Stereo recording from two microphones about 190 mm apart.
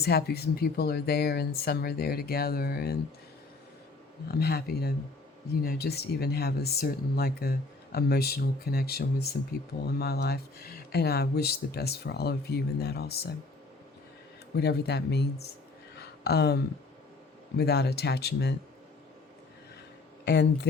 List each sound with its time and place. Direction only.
0.0 s speech: 55° left (ahead or behind)
4.3 s speech: 55° left (ahead or behind)
14.5 s speech: 60° left (ahead or behind)
16.0 s a sound: 60° left (ahead or behind)
17.6 s speech: 60° left (ahead or behind)
20.2 s speech: 60° left (ahead or behind)